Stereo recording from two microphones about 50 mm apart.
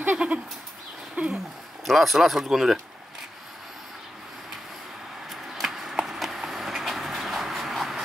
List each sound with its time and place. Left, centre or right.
0.2 s goat: right
1.9 s speech: centre
5.3 s a sound: centre